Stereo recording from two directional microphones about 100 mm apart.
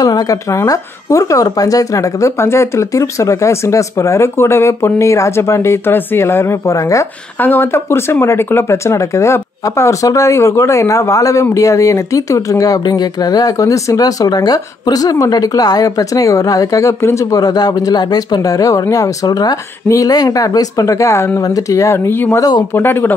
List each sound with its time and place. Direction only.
0.0 s speech: 40° left (ahead or behind)
7.3 s speech: 20° left (ahead or behind)